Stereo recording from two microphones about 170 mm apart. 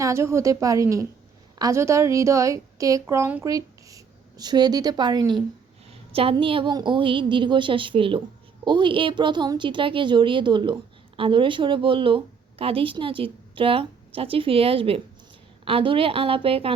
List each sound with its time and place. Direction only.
0.0 s a woman's voice: 15° right (ahead or behind); by 16.7 s 35° right (ahead or behind)